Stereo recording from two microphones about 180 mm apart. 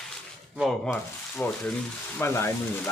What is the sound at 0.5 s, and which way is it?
Speech, centre (ahead or behind).